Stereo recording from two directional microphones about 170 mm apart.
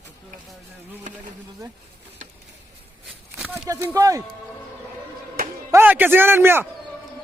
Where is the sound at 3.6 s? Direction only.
20° right (ahead or behind).